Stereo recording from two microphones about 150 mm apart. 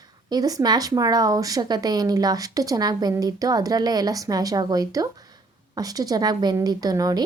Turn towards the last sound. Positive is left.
turn(degrees=-25)  # may be behind; listen again after turning